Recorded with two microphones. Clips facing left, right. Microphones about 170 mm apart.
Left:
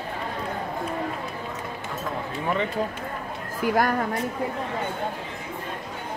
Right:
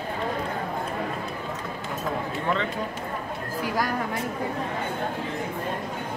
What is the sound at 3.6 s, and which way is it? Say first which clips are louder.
Speech: left 6 dB; 55° left (ahead or behind).